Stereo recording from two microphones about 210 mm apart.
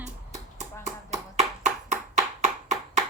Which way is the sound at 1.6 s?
35° right (ahead or behind).